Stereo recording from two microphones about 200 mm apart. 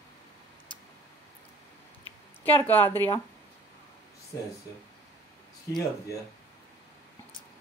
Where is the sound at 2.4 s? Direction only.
10° left (ahead or behind).